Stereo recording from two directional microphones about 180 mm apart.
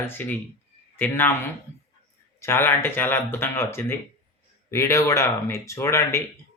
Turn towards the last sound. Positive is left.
turn(degrees=15)  # may be behind; listen again after turning